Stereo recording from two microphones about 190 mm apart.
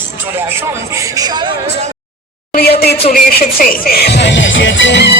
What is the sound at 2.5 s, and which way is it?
Speech, 55° left (ahead or behind).